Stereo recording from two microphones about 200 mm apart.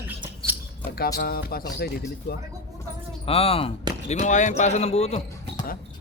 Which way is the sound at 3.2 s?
30° left (ahead or behind).